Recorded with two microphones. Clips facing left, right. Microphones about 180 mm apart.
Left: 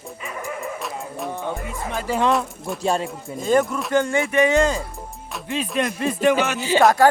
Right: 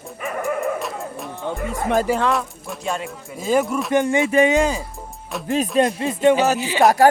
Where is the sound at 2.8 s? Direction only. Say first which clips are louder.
Left 4 dB; 35° left (ahead or behind).